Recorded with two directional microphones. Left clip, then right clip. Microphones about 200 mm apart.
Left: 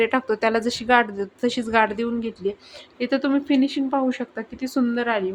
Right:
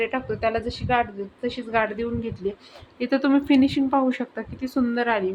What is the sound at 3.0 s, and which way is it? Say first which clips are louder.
Speech: right 1 dB; centre (ahead or behind).